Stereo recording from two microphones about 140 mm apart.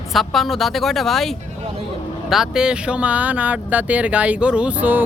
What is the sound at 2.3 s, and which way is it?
Speech, 5° right (ahead or behind).